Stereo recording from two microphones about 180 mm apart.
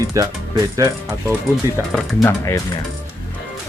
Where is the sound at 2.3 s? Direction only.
20° left (ahead or behind).